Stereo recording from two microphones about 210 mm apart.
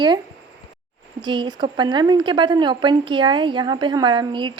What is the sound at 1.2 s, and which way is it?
A woman's voice, 20° right (ahead or behind).